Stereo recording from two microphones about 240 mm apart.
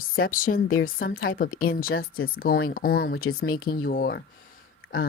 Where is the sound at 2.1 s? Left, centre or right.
Left.